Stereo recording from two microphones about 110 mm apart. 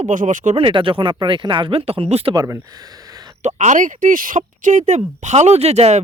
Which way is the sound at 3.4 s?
90° right.